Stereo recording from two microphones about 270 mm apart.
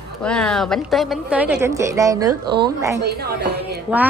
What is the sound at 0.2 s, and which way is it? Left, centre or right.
A woman's voice, centre.